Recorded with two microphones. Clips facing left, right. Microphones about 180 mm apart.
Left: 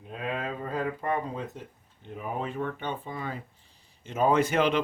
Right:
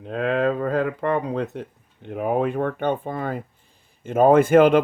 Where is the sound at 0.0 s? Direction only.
75° right (ahead or behind).